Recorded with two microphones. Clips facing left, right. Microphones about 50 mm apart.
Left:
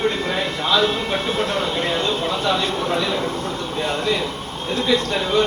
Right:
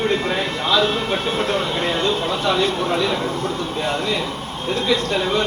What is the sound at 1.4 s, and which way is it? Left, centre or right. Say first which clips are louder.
Speech: right 1 dB; right.